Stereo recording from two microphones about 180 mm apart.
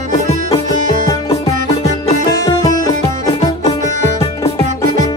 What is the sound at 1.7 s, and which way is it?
Music, 35° left (ahead or behind).